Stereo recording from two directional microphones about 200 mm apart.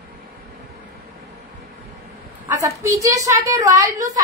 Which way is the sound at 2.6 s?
15° right (ahead or behind).